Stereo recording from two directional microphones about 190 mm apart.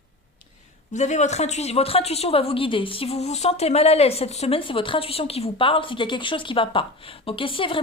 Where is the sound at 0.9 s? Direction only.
40° left (ahead or behind).